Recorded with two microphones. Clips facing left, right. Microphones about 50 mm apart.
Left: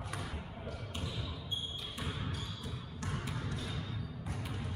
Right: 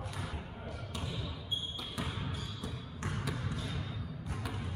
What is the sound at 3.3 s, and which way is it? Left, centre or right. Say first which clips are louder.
Basketball bounce: right 2 dB; centre.